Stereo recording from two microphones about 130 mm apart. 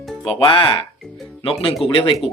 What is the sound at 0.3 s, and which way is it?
Speech, 40° left (ahead or behind).